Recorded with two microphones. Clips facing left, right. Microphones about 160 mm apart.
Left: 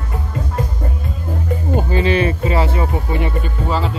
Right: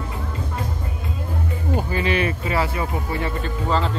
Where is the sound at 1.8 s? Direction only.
30° left (ahead or behind).